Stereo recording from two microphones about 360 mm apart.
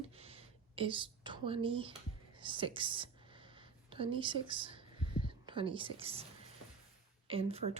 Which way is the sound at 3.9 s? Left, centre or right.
Centre.